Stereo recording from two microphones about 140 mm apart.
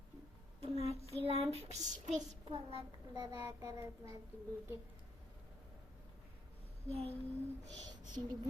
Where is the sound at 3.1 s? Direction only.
20° right (ahead or behind).